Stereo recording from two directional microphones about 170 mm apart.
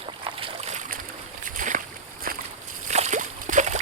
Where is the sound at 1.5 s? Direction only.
50° right (ahead or behind).